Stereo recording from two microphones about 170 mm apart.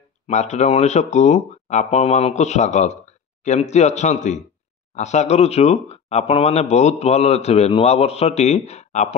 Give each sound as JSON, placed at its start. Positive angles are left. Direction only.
{"t": 0.3, "sound": "speech", "side_deg": 40}